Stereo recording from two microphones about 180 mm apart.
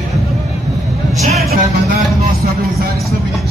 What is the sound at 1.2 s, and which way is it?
Vehicle, 35° right (ahead or behind).